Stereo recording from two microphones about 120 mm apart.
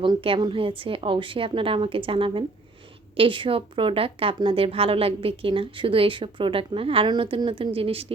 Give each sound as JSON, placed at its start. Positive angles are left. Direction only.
{"t": 0.0, "sound": "a woman's voice", "side_deg": -45}